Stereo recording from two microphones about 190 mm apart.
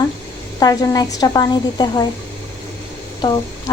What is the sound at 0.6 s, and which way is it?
Speech, 20° left (ahead or behind).